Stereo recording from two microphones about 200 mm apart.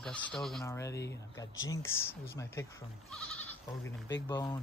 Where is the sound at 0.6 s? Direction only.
15° left (ahead or behind).